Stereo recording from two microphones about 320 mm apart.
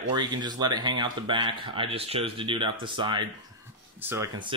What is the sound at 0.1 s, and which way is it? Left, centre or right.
Speech, centre.